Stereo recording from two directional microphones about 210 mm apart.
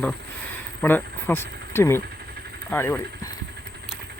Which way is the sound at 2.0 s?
50° right (ahead or behind).